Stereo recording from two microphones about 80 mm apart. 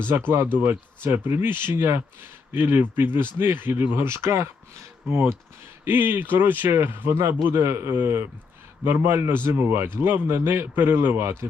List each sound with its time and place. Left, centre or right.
0.3 s a man's voice: right
5.8 s a man's voice: right